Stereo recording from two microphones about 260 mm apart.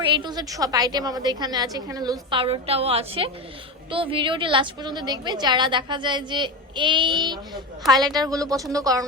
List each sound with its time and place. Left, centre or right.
0.0 s a woman's voice: centre